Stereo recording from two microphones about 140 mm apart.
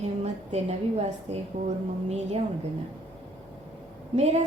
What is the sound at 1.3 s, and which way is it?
Speech, 50° right (ahead or behind).